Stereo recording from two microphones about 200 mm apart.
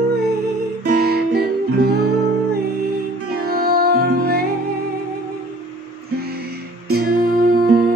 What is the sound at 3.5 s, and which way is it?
Music, 50° right (ahead or behind).